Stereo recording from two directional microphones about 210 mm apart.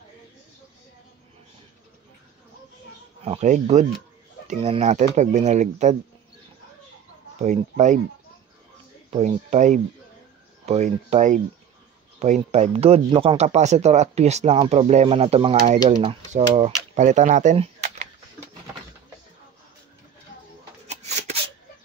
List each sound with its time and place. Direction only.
3.2 s speech: 30° right (ahead or behind)
7.4 s speech: 35° right (ahead or behind)
9.1 s speech: 35° right (ahead or behind)
20.9 s shuffling cards: 30° right (ahead or behind)